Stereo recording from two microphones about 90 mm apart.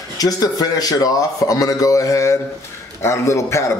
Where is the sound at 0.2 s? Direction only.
45° left (ahead or behind).